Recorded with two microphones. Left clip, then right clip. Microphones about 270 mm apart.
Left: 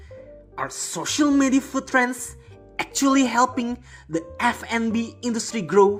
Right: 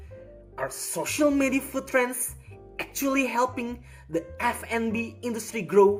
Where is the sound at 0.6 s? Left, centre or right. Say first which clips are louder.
Left 2 dB; centre.